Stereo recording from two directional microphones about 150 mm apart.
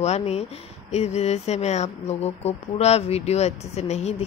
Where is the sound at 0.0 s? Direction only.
45° left (ahead or behind).